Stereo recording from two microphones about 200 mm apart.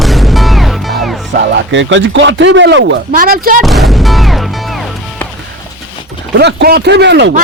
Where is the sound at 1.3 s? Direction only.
60° right (ahead or behind).